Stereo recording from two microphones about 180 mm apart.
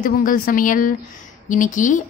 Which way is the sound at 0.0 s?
50° left (ahead or behind).